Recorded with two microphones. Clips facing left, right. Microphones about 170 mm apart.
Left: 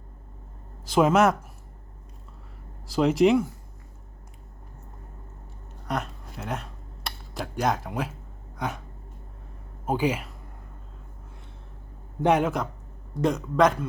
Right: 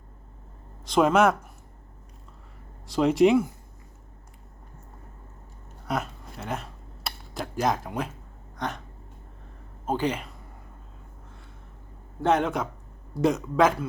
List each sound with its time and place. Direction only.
0.9 s speech: 5° left (ahead or behind)
2.8 s speech: centre (ahead or behind)
5.9 s a sound: centre (ahead or behind)
9.8 s speech: 10° left (ahead or behind)
12.2 s speech: 10° left (ahead or behind)